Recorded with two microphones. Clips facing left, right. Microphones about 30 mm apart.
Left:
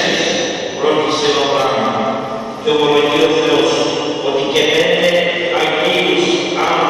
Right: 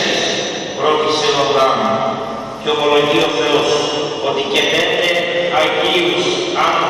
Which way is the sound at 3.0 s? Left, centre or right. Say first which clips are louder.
Left 2 dB; centre.